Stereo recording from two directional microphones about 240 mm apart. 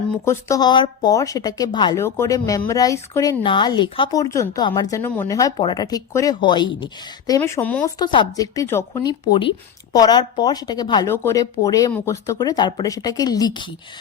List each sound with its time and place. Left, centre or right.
0.3 s speech: centre
7.9 s speech: centre